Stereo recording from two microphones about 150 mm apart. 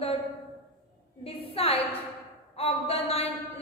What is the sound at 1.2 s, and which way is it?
Speech, 40° left (ahead or behind).